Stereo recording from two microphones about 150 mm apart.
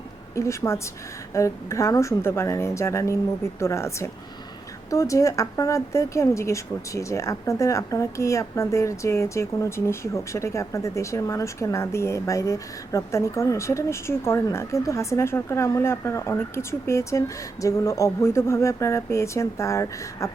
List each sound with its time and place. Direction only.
0.3 s speech: 20° left (ahead or behind)